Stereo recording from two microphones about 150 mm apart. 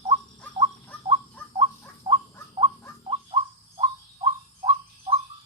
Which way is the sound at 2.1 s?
35° right (ahead or behind).